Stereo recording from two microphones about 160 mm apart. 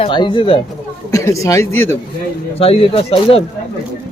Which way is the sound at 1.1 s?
20° left (ahead or behind).